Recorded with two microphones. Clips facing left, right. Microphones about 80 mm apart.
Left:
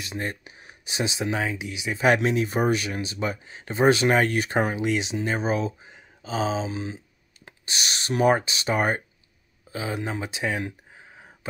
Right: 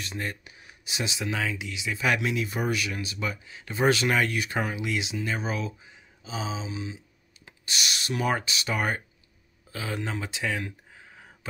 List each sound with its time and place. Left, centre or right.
0.0 s speech: left
2.0 s speech: left
5.9 s a sound: left
7.6 s speech: left